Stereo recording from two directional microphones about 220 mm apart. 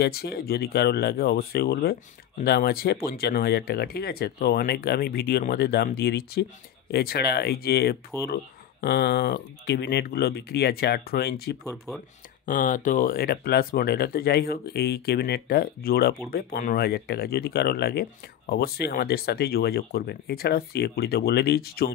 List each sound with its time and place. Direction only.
0.0 s speech: 45° left (ahead or behind)